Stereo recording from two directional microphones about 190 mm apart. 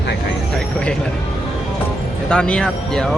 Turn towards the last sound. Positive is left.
turn(degrees=5)  # may be behind; listen again after turning